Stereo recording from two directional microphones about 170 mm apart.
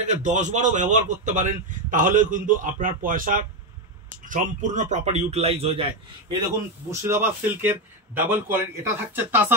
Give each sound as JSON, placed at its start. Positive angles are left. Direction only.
{"t": 0.0, "sound": "a man's voice", "side_deg": -45}
{"t": 6.9, "sound": "a man's voice", "side_deg": -15}